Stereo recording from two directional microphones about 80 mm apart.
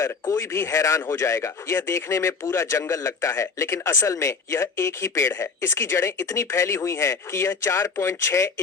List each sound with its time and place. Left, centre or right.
0.0 s speech: left